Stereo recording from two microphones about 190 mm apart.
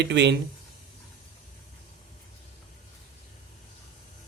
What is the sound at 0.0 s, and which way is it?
Speech, 65° right (ahead or behind).